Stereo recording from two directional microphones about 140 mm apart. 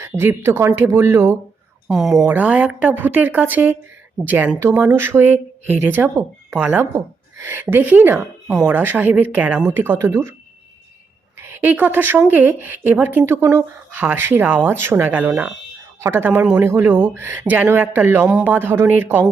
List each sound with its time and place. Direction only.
0.0 s speech: 15° right (ahead or behind)
1.9 s speech: centre (ahead or behind)
2.2 s speech: 10° right (ahead or behind)
11.3 s speech: 15° right (ahead or behind)